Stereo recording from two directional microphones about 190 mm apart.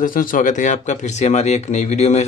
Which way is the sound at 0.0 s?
45° left (ahead or behind).